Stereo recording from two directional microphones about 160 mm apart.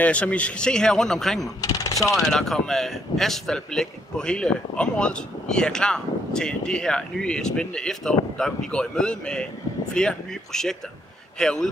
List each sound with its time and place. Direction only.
0.0 s speech: 10° left (ahead or behind)
1.6 s speech: 20° left (ahead or behind)
2.1 s speech: centre (ahead or behind)